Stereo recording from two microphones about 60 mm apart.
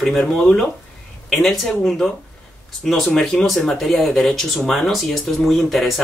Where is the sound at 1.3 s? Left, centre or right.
Centre.